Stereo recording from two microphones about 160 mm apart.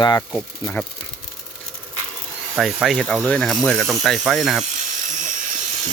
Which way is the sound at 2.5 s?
Centre (ahead or behind).